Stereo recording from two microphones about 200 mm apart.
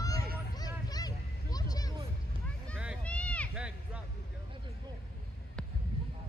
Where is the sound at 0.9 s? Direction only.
20° left (ahead or behind).